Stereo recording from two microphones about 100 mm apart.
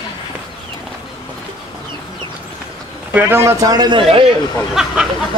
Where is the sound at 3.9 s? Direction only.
60° right (ahead or behind).